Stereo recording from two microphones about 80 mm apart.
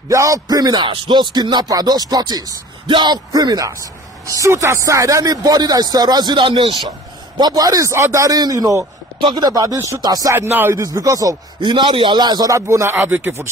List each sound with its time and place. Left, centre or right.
0.1 s speech: right
0.7 s speech: right
2.9 s speech: right
7.3 s speech: right
7.9 s speech: right
9.2 s speech: right
10.3 s speech: right
10.8 s speech: right
11.6 s a man's voice: right
12.5 s speech: right